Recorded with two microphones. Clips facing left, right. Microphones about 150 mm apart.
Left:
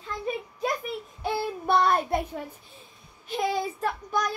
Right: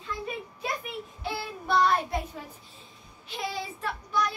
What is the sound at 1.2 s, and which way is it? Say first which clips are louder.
Child singing: left 5 dB; 50° left (ahead or behind).